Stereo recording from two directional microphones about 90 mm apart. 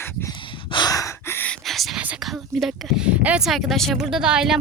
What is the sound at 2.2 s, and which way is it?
Speech, centre (ahead or behind).